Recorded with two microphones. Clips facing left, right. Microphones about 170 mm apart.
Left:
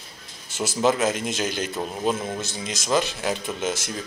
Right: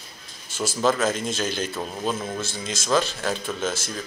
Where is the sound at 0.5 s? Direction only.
20° left (ahead or behind).